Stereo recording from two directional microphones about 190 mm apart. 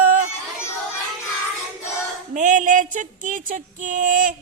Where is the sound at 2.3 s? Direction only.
40° right (ahead or behind).